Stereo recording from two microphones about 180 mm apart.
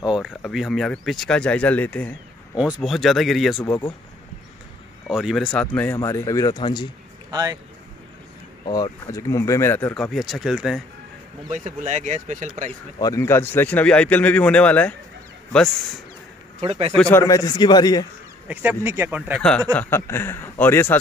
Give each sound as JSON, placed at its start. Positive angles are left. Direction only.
{"t": 0.0, "sound": "speech", "side_deg": 0}
{"t": 2.5, "sound": "speech", "side_deg": 0}
{"t": 3.6, "sound": "speech", "side_deg": 20}
{"t": 5.0, "sound": "speech", "side_deg": 0}
{"t": 7.2, "sound": "speech", "side_deg": -20}
{"t": 8.6, "sound": "speech", "side_deg": 25}
{"t": 9.9, "sound": "speech", "side_deg": 0}
{"t": 11.5, "sound": "speech", "side_deg": -45}
{"t": 12.6, "sound": "speech", "side_deg": 15}
{"t": 16.5, "sound": "speech", "side_deg": -35}
{"t": 16.9, "sound": "speech", "side_deg": 5}
{"t": 17.2, "sound": "speech", "side_deg": 20}
{"t": 18.5, "sound": "speech", "side_deg": -10}
{"t": 19.7, "sound": "speech", "side_deg": 10}